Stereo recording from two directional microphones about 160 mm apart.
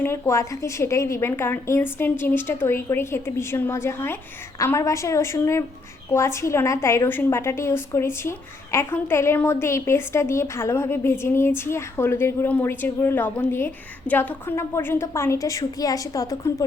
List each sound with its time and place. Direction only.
0.0 s a woman's voice: 15° left (ahead or behind)